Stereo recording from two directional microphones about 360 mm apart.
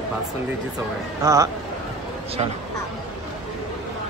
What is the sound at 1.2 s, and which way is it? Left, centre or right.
Speech, centre.